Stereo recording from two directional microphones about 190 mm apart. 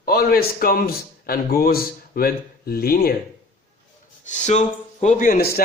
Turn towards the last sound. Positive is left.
turn(degrees=55)  # may be behind; listen again after turning